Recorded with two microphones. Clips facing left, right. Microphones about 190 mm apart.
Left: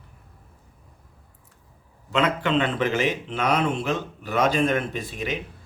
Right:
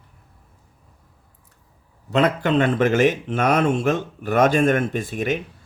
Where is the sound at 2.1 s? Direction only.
40° right (ahead or behind).